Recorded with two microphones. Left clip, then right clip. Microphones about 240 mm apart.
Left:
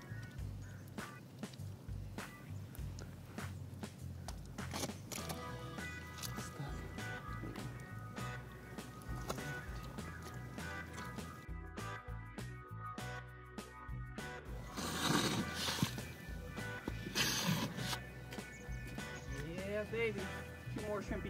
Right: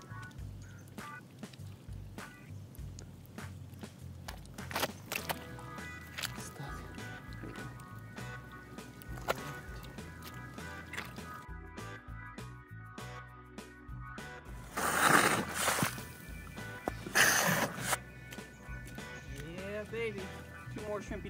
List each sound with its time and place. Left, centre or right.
0.9 s music: centre
4.6 s music: centre
14.8 s a sound: centre
15.2 s horse: centre
16.5 s music: centre
17.2 s music: centre
18.9 s music: centre